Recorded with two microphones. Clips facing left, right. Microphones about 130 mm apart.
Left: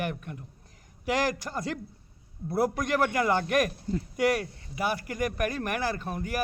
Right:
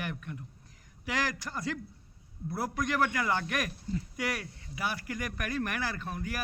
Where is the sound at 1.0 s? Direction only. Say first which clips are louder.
Left 6 dB; 45° left (ahead or behind).